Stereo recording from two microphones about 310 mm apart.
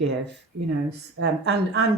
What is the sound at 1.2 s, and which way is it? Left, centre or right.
Speech, right.